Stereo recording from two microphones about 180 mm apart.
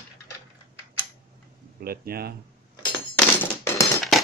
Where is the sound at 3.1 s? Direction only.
10° left (ahead or behind).